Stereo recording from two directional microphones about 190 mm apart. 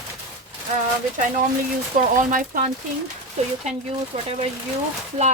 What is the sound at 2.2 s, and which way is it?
Speech, 45° right (ahead or behind).